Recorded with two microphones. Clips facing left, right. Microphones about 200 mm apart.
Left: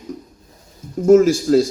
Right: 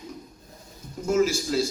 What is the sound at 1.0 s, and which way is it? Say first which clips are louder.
Speech: left 11 dB; 50° left (ahead or behind).